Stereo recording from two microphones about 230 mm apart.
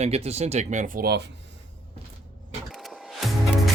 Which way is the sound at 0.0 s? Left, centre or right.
Right.